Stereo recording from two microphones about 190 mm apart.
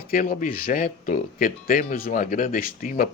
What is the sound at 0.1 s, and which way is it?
Speech, 45° left (ahead or behind).